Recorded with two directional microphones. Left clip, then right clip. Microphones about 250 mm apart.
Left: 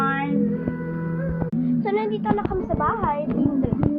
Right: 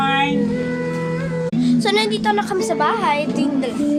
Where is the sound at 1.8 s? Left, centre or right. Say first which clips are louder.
Right 5 dB; right.